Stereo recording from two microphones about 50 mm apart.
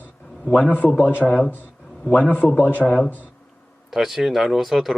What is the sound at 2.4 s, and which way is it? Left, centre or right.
Speech, left.